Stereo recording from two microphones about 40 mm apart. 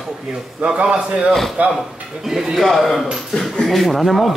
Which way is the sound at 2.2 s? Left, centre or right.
Centre.